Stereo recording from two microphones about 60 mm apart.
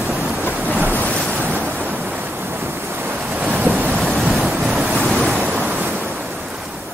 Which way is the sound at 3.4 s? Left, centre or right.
Right.